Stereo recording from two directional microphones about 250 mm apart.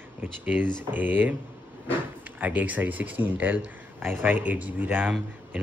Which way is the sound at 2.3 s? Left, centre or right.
Centre.